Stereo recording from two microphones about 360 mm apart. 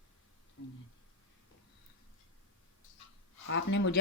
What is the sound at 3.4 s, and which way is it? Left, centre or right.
Speech, left.